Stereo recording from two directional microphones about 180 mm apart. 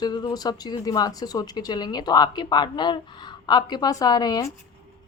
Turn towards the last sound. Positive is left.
turn(degrees=20)  # may be behind; listen again after turning